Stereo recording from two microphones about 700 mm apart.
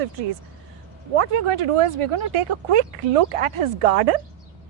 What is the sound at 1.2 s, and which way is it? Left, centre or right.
Speech, right.